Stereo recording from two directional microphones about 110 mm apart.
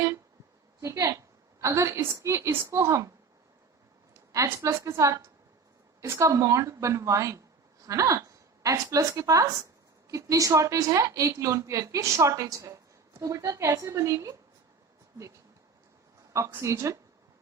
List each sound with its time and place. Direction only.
0.8 s a woman's voice: 30° right (ahead or behind)
4.1 s a woman's voice: 30° right (ahead or behind)
16.3 s a woman's voice: 25° right (ahead or behind)